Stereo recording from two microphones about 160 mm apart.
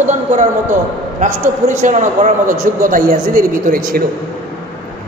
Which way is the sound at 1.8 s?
50° right (ahead or behind).